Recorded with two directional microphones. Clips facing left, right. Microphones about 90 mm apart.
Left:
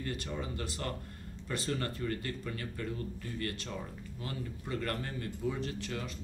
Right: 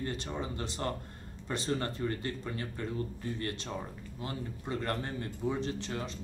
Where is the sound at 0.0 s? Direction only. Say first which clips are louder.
Right 2 dB; 25° right (ahead or behind).